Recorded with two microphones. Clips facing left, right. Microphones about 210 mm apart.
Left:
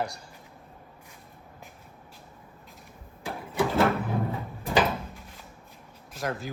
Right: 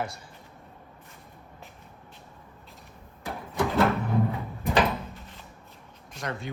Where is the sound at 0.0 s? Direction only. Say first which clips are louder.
Left 1 dB; centre (ahead or behind).